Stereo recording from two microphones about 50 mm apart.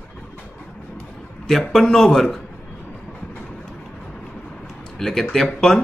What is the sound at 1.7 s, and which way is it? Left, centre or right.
Speech, centre.